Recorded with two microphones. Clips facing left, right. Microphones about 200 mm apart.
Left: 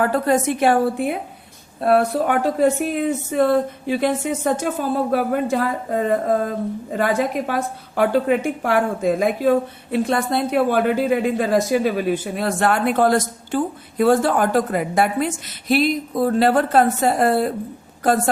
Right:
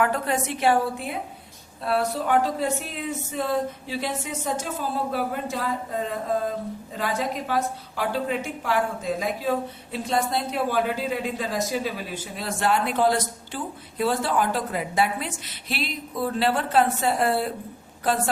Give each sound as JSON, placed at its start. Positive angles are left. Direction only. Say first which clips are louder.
{"t": 0.0, "sound": "a woman's voice", "louder": "left 6 dB", "side_deg": 40}